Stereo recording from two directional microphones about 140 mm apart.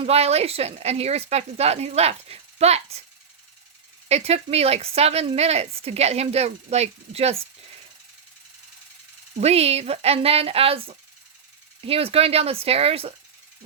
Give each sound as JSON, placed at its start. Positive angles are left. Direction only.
{"t": 0.0, "sound": "speech", "side_deg": -50}
{"t": 4.1, "sound": "speech", "side_deg": -45}
{"t": 9.4, "sound": "speech", "side_deg": -50}